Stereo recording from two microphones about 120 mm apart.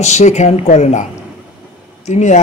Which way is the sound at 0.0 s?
75° left (ahead or behind).